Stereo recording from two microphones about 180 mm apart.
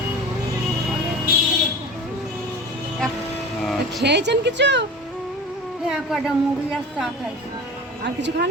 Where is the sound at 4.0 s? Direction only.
70° right (ahead or behind).